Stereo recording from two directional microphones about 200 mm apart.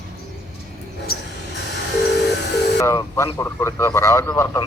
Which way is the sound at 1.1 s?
50° left (ahead or behind).